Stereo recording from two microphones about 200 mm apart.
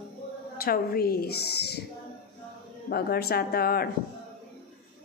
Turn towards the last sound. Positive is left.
turn(degrees=50)  # may be behind; listen again after turning